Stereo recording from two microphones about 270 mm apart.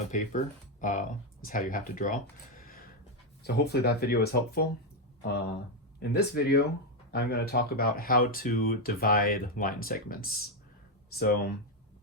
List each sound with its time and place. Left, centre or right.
0.1 s speech: left